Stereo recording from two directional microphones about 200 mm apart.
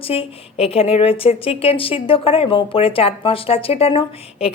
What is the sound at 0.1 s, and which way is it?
A woman's voice, 30° left (ahead or behind).